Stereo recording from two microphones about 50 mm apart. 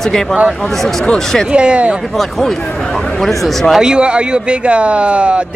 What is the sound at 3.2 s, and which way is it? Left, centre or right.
Speech, centre.